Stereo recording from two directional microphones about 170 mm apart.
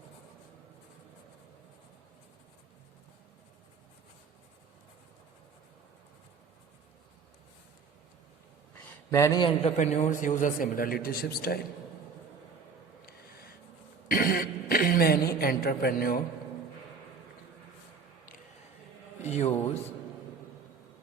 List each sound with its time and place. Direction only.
9.0 s a man's voice: 20° left (ahead or behind)
9.6 s a man's voice: 45° left (ahead or behind); by 11.6 s 65° left (ahead or behind)
13.1 s writing: 65° left (ahead or behind)
14.1 s throat clearing: 55° left (ahead or behind)
19.2 s a man's voice: 40° left (ahead or behind)